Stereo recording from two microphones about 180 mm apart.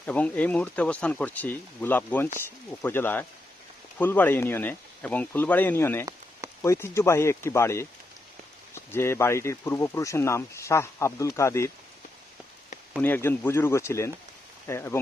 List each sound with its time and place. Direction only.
0.0 s speech: 10° left (ahead or behind)
13.0 s speech: 10° left (ahead or behind)